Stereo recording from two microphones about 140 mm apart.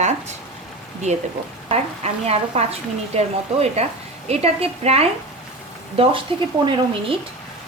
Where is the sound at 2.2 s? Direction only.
45° right (ahead or behind).